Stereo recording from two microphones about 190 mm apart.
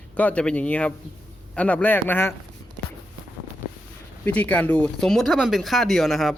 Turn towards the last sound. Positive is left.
turn(degrees=0)  # may be behind; listen again after turning